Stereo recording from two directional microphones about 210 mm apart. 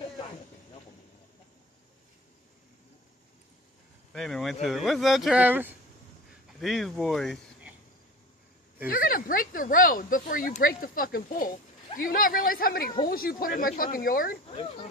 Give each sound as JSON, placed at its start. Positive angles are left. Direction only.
{"t": 4.1, "sound": "speech", "side_deg": 0}
{"t": 8.9, "sound": "speech", "side_deg": 40}